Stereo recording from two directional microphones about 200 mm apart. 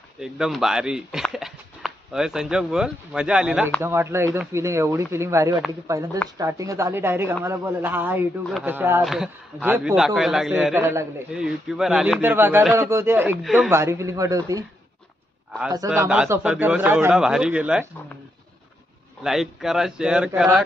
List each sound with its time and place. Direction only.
0.2 s a man's voice: 5° right (ahead or behind)
1.3 s a sound: centre (ahead or behind)
2.1 s a man's voice: 5° right (ahead or behind)
10.8 s a man's voice: 10° right (ahead or behind)
13.4 s a man's voice: centre (ahead or behind)
13.7 s a man's voice: 15° right (ahead or behind)
15.7 s a man's voice: 15° right (ahead or behind)
16.1 s a man's voice: 5° right (ahead or behind)
19.2 s a man's voice: centre (ahead or behind)